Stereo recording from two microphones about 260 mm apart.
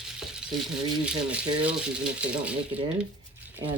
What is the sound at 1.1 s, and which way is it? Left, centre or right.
Speech, centre.